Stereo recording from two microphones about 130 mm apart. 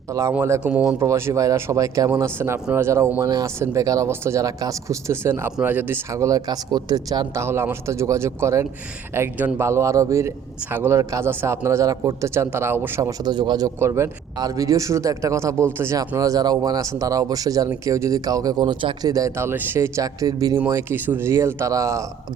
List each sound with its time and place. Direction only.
0.1 s a man's voice: 25° right (ahead or behind)
7.4 s a man's voice: 20° right (ahead or behind); by 13.7 s 35° right (ahead or behind)
13.7 s a man's voice: 20° right (ahead or behind); by 19.1 s 40° right (ahead or behind)
19.1 s a man's voice: 20° right (ahead or behind)